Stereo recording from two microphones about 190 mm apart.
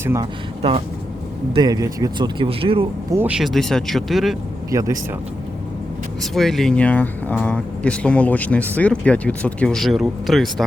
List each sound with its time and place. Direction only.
0.0 s speech: 15° right (ahead or behind)
1.5 s speech: 20° right (ahead or behind)
3.1 s speech: 10° right (ahead or behind)
4.7 s speech: 15° right (ahead or behind)
6.3 s speech: centre (ahead or behind)